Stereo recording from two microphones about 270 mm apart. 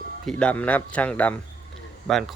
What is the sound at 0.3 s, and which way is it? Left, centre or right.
Speech, centre.